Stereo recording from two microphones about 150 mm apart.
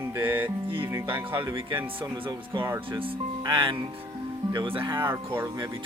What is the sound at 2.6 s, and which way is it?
Music, 15° right (ahead or behind).